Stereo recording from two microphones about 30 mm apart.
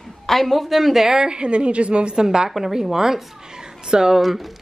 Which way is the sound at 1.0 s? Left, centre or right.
Centre.